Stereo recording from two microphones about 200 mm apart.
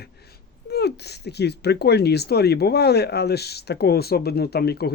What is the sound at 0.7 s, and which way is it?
Speech, 55° left (ahead or behind).